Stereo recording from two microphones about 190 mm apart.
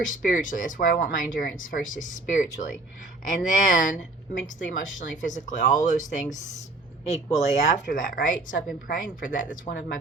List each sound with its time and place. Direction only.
0.1 s speech: 45° left (ahead or behind)